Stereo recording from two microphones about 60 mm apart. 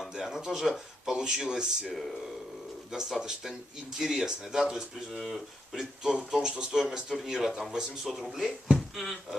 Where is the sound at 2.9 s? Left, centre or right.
Centre.